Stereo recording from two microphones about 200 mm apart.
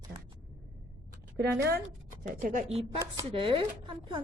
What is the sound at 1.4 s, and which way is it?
Speech, 55° right (ahead or behind).